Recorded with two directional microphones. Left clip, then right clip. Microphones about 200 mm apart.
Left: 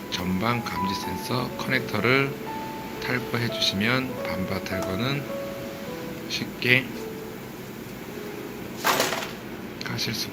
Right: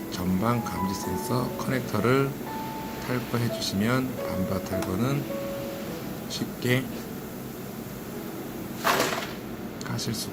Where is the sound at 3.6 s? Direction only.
20° right (ahead or behind).